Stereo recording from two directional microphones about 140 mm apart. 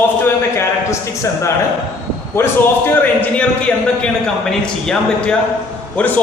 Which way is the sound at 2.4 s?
15° left (ahead or behind).